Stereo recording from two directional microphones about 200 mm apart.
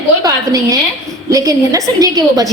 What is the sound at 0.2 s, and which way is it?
A woman's voice, 15° right (ahead or behind).